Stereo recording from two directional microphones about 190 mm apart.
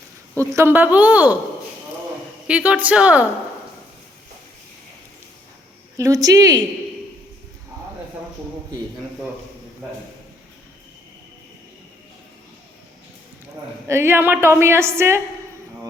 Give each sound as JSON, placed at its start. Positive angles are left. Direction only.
{"t": 0.3, "sound": "a woman's voice", "side_deg": -15}
{"t": 2.5, "sound": "a woman's voice", "side_deg": -10}
{"t": 6.0, "sound": "speech", "side_deg": -20}
{"t": 13.8, "sound": "a woman's voice", "side_deg": -15}